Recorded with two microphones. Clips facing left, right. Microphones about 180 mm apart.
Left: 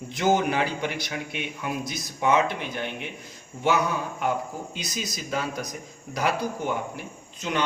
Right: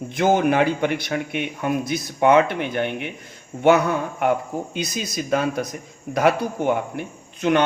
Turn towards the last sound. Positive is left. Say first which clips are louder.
# right 9 dB
turn(degrees=-60)  # may be behind; listen again after turning